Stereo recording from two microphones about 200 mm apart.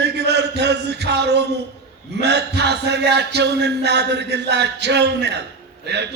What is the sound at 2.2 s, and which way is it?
A man's voice, 55° right (ahead or behind).